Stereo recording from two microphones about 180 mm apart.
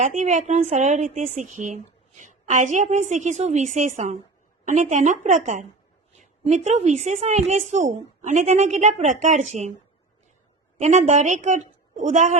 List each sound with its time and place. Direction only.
0.0 s a woman's voice: 45° right (ahead or behind)
10.8 s a woman's voice: 40° right (ahead or behind)